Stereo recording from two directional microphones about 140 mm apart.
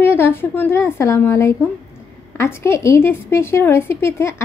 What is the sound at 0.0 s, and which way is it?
A woman's voice, 15° left (ahead or behind).